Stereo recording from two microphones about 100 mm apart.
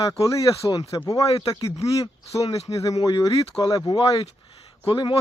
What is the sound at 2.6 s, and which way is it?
Speech, 35° left (ahead or behind).